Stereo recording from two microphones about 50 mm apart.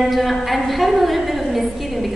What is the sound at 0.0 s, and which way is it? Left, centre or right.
A woman's voice, centre.